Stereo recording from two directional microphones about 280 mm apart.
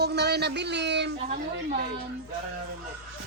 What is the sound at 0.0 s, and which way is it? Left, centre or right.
Speech, right.